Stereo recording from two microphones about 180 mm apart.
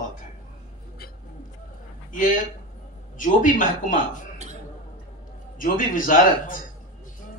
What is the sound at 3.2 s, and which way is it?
Speech, 45° left (ahead or behind).